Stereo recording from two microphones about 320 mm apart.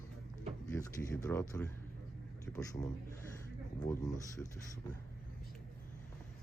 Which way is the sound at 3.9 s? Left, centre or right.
Centre.